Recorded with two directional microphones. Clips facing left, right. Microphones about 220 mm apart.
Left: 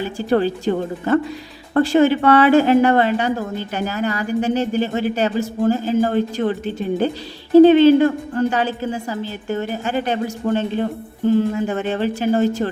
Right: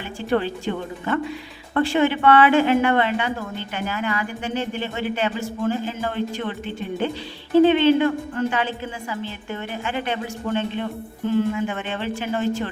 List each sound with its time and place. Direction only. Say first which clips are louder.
0.0 s a woman's voice: left 5 dB; 40° left (ahead or behind)